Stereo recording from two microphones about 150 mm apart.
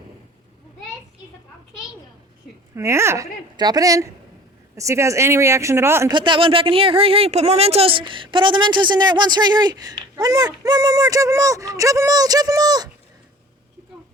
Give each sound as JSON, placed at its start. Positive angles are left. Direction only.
{"t": 2.7, "sound": "speech", "side_deg": -20}
{"t": 6.1, "sound": "speech", "side_deg": -30}